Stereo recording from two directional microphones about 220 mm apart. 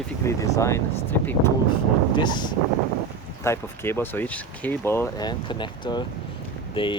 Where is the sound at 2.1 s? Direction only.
20° left (ahead or behind).